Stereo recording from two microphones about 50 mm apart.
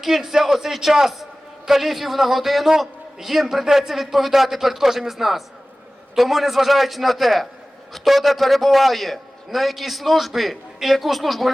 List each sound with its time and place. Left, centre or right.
0.0 s a man's voice: centre